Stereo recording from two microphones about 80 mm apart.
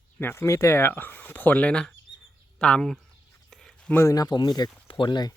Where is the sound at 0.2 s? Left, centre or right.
Left; by 2.9 s centre.